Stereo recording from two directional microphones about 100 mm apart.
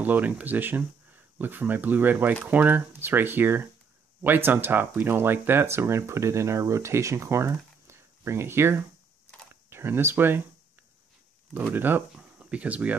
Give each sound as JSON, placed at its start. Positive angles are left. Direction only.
{"t": 0.0, "sound": "speech", "side_deg": -15}
{"t": 11.5, "sound": "speech", "side_deg": -15}